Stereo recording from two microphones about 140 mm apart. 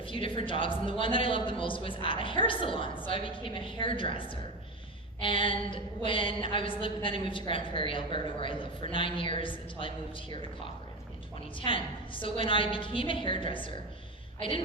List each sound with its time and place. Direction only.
0.0 s a woman's voice: 40° left (ahead or behind)
11.6 s a woman's voice: 40° left (ahead or behind)